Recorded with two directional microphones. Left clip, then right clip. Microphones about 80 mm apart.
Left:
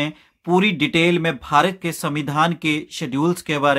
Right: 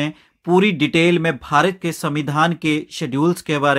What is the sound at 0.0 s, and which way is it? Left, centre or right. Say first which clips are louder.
Speech: right 1 dB; right.